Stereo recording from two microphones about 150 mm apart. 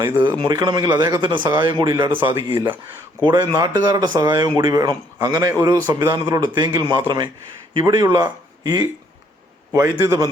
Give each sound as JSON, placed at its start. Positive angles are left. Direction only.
{"t": 0.2, "sound": "speech", "side_deg": -30}